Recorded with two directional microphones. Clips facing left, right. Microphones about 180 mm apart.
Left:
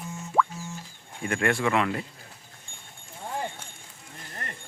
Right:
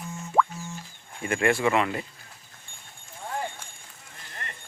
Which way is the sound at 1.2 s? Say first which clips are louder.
Right 2 dB; 5° right (ahead or behind).